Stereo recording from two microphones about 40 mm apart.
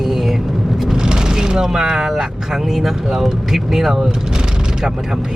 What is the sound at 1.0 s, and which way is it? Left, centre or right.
Vehicle, centre.